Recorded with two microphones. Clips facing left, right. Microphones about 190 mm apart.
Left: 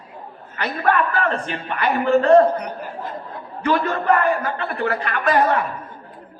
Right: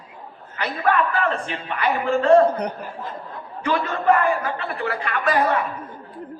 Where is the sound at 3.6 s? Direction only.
50° left (ahead or behind).